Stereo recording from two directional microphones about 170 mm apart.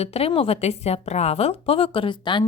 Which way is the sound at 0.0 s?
35° left (ahead or behind).